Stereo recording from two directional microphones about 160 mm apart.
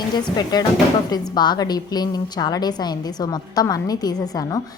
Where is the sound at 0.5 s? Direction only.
25° left (ahead or behind).